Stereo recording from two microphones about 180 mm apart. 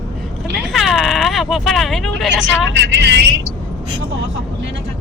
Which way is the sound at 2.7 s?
75° right (ahead or behind).